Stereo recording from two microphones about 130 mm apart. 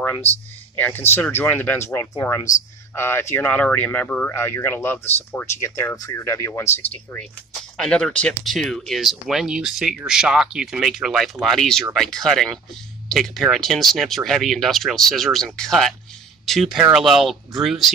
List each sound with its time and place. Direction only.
0.0 s speech: 15° left (ahead or behind)